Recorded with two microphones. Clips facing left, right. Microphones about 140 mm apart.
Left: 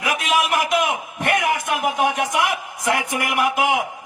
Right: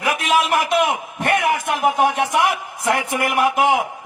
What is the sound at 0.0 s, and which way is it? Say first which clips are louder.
A man's voice: right 2 dB; 30° right (ahead or behind).